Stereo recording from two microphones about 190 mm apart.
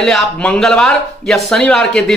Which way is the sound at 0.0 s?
Centre (ahead or behind).